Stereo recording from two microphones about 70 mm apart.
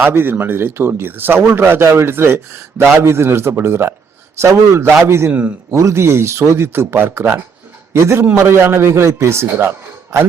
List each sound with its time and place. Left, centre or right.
0.1 s a man's voice: right
5.3 s a man's voice: centre
5.7 s a man's voice: right